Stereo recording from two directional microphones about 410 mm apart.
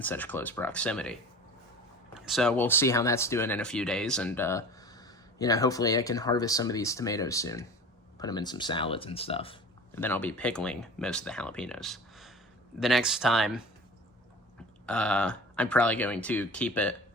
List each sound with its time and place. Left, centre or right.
0.0 s speech: centre
2.1 s speech: centre
14.8 s speech: centre